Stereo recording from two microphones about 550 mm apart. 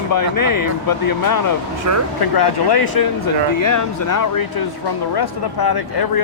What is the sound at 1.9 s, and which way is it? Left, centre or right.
Speech, right.